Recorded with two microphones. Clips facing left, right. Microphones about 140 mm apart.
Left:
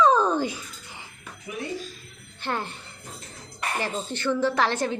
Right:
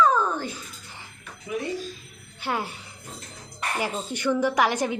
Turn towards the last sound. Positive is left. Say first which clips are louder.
# right 1 dB
turn(degrees=-15)  # may be behind; listen again after turning